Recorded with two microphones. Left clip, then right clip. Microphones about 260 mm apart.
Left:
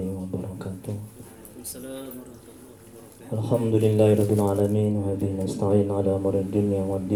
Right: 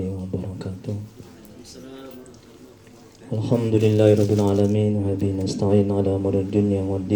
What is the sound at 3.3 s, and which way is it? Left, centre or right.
Mantra, right.